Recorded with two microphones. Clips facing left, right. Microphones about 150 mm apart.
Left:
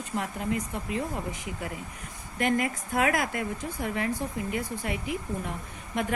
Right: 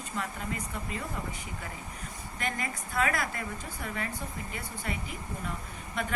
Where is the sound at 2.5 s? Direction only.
55° left (ahead or behind).